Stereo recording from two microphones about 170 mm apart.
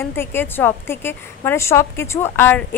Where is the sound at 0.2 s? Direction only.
10° left (ahead or behind).